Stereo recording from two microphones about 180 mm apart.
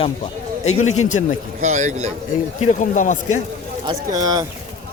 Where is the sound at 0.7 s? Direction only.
40° left (ahead or behind).